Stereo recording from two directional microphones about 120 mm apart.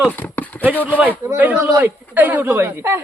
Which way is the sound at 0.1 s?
15° left (ahead or behind).